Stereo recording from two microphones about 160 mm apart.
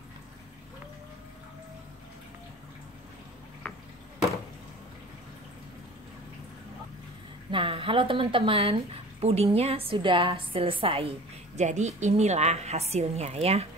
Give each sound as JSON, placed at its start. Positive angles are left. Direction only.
{"t": 7.5, "sound": "a woman's voice", "side_deg": -35}